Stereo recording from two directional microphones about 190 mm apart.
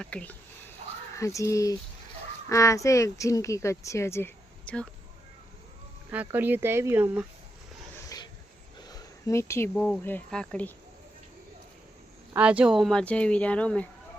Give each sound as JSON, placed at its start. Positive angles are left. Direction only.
{"t": 0.0, "sound": "speech", "side_deg": 5}
{"t": 6.1, "sound": "speech", "side_deg": -10}
{"t": 8.9, "sound": "a sound", "side_deg": 15}
{"t": 9.7, "sound": "speech", "side_deg": 5}
{"t": 12.3, "sound": "speech", "side_deg": -5}